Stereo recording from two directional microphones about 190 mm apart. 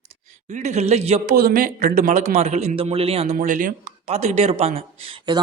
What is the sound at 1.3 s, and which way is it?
Speech, 50° right (ahead or behind).